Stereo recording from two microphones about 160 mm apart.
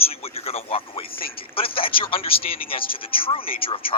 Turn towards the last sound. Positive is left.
turn(degrees=35)  # may be behind; listen again after turning